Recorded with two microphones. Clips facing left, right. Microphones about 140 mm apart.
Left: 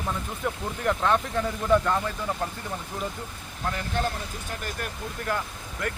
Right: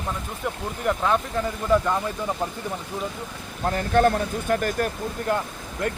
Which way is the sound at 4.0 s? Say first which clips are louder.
Right 14 dB; 60° right (ahead or behind).